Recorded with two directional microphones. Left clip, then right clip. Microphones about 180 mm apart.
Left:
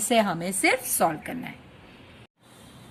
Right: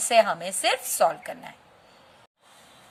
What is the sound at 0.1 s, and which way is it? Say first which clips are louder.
A woman's voice: right 3 dB; 15° right (ahead or behind).